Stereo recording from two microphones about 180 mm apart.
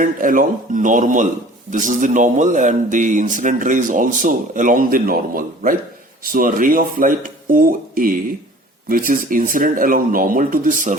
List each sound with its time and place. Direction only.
0.0 s speech: 50° right (ahead or behind)